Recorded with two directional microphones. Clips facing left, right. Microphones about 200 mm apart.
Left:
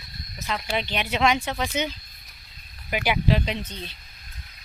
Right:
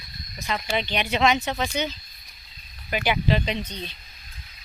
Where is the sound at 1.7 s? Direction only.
15° left (ahead or behind).